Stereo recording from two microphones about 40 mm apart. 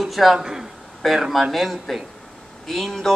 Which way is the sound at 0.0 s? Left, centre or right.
Centre.